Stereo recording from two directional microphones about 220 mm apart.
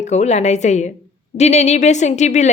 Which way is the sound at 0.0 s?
30° left (ahead or behind).